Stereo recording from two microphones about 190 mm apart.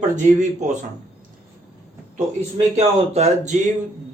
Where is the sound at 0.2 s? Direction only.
40° right (ahead or behind).